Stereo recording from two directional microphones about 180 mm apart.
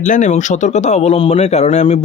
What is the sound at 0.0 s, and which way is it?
A man's voice, 45° left (ahead or behind).